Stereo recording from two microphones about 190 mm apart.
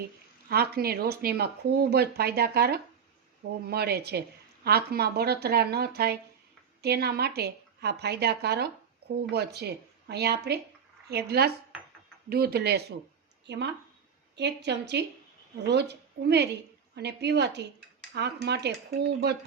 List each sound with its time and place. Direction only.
0.4 s a woman's voice: 55° right (ahead or behind)